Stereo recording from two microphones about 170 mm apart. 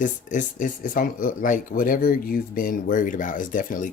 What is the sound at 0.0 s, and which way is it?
Speech, 50° left (ahead or behind).